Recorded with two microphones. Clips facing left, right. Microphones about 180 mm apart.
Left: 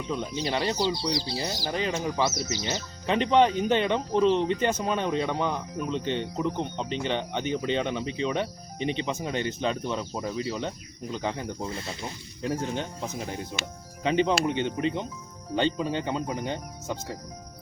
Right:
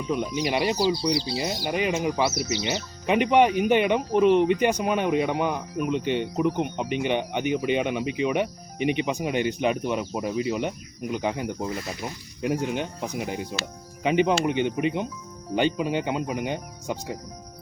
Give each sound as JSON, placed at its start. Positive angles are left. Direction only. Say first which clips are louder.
{"t": 0.1, "sound": "speech", "louder": "right 4 dB", "side_deg": -15}
{"t": 11.7, "sound": "speech", "louder": "right 4 dB", "side_deg": 25}
{"t": 12.0, "sound": "speech", "louder": "right 4 dB", "side_deg": -15}